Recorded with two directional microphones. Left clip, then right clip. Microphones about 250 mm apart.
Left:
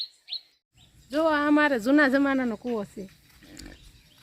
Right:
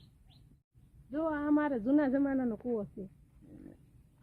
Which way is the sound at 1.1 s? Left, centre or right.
Left.